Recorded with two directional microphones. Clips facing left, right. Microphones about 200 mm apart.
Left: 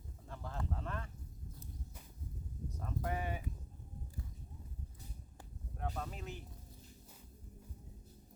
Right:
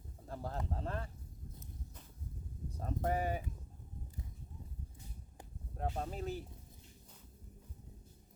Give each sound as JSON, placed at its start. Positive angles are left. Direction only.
{"t": 0.3, "sound": "speech", "side_deg": -35}
{"t": 2.7, "sound": "a sound", "side_deg": -35}
{"t": 5.7, "sound": "speech", "side_deg": -35}